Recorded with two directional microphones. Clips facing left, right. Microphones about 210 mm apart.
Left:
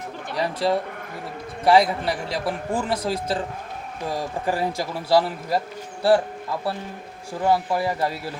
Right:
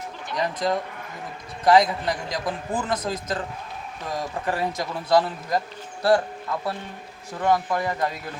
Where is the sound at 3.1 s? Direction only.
30° left (ahead or behind).